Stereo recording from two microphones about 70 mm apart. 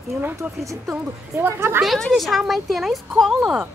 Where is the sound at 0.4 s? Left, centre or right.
Right.